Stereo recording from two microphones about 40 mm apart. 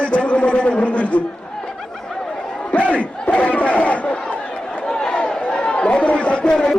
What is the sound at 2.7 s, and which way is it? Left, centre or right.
Battle cry, left.